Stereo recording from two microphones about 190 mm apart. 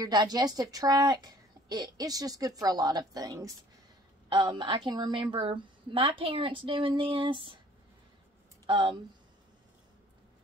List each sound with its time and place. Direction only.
0.0 s a woman's voice: 20° right (ahead or behind)
8.6 s speech: 25° right (ahead or behind)